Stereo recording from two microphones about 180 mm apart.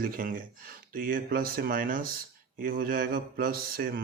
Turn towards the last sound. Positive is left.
turn(degrees=-55)  # may be behind; listen again after turning